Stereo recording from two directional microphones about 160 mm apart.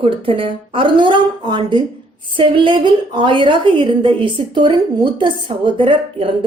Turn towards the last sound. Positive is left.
turn(degrees=-30)  # may be behind; listen again after turning